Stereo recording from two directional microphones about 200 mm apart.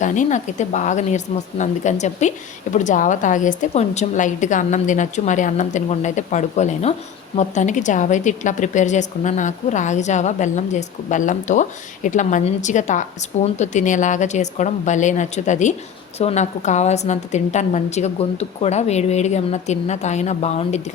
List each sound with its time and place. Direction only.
0.0 s a woman's voice: 40° left (ahead or behind)